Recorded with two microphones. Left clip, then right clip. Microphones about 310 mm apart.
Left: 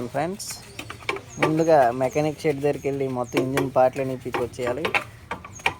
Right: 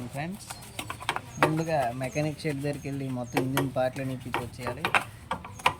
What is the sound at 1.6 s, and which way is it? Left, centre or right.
Speech, left.